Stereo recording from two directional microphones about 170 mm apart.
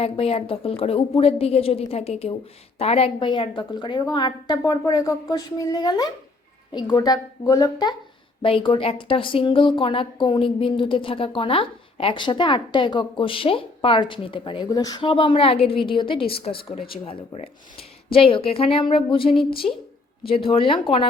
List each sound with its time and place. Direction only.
0.0 s a woman's voice: 35° left (ahead or behind)